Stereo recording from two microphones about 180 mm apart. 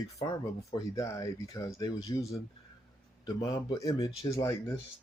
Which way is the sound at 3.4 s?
20° left (ahead or behind).